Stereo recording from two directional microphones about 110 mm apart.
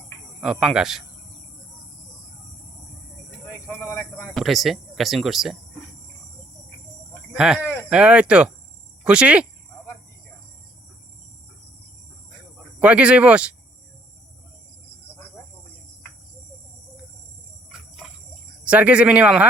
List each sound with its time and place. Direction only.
0.4 s speech: 5° right (ahead or behind)
3.4 s a sound: 25° left (ahead or behind)
4.4 s speech: centre (ahead or behind)
7.3 s speech: 5° right (ahead or behind)
7.6 s a sound: 20° left (ahead or behind)
7.9 s speech: 10° right (ahead or behind)
12.8 s speech: 10° right (ahead or behind)
17.7 s cricket: 5° right (ahead or behind)
18.6 s speech: 10° right (ahead or behind)